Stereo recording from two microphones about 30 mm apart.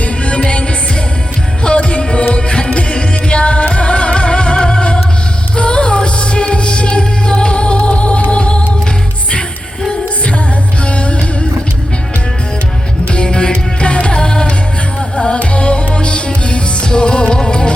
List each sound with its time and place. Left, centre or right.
0.0 s music: left
10.8 s music: left
13.2 s music: left